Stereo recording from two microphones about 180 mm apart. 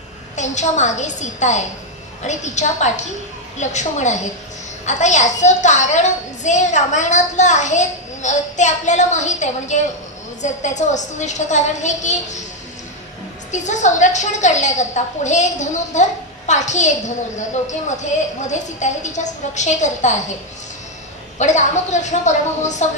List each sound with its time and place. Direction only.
0.4 s a woman's voice: 40° left (ahead or behind)
13.5 s a woman's voice: 40° left (ahead or behind)
21.4 s a woman's voice: 40° left (ahead or behind)